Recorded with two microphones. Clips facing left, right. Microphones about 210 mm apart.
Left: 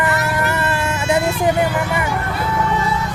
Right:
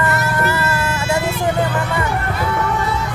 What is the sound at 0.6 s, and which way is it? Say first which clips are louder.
Vehicle: left 1 dB; 15° left (ahead or behind).